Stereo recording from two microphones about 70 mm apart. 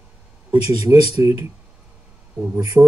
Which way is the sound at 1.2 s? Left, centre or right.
Right.